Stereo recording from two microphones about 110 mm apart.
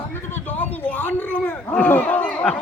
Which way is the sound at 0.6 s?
15° left (ahead or behind).